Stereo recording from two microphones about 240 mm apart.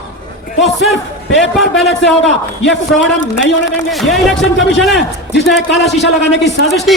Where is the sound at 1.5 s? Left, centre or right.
Centre.